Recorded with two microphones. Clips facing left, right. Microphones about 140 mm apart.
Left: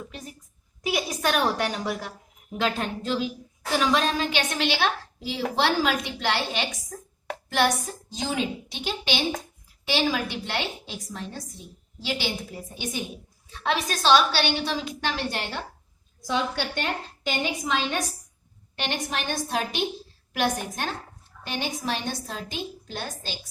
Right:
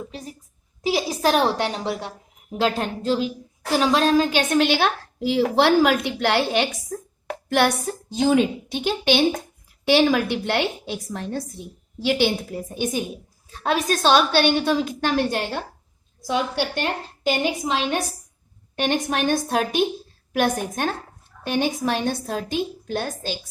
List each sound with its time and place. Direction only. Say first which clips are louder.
0.0 s a sound: right 5 dB; 30° right (ahead or behind)
0.8 s a woman's voice: right 5 dB; 30° right (ahead or behind); by 6.7 s 55° right (ahead or behind)
8.1 s a woman's voice: right 10 dB; 55° right (ahead or behind)
16.8 s a woman's voice: right 6 dB; 35° right (ahead or behind)
18.8 s a woman's voice: right 8 dB; 50° right (ahead or behind)